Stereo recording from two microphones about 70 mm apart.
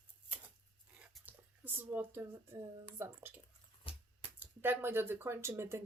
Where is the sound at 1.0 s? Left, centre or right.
Right.